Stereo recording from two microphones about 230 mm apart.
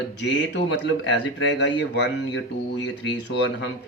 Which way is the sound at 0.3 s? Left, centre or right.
Left.